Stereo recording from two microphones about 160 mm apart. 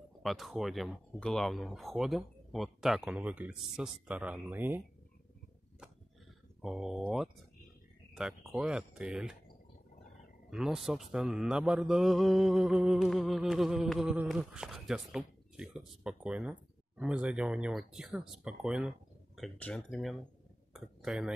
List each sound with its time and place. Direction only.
0.2 s speech: centre (ahead or behind)
6.6 s speech: 5° right (ahead or behind)
8.1 s a sound: 5° right (ahead or behind)
8.5 s speech: 5° right (ahead or behind)
10.5 s speech: 5° right (ahead or behind)